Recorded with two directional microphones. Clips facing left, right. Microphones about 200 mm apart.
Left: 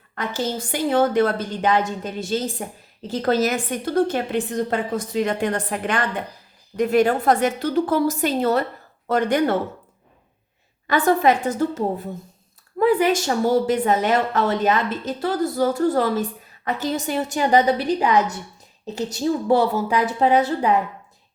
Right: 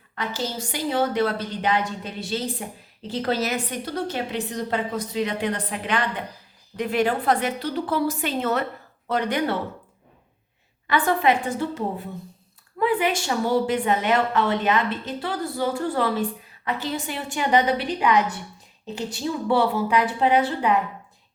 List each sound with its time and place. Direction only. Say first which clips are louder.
0.2 s a woman's voice: left 4 dB; 50° left (ahead or behind)
10.8 s a woman's voice: left 3 dB; 40° left (ahead or behind)